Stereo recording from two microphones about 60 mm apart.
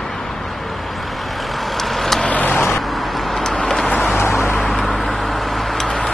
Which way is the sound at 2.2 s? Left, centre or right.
Left.